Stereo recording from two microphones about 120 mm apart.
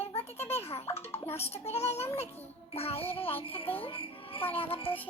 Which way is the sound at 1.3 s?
60° left (ahead or behind).